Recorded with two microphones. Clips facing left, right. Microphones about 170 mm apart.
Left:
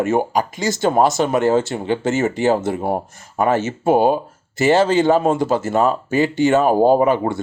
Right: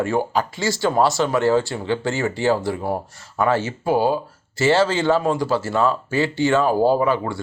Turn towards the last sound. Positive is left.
turn(degrees=20)  # may be behind; listen again after turning